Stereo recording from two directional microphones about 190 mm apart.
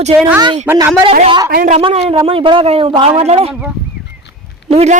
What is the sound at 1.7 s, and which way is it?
A man's voice, 35° right (ahead or behind).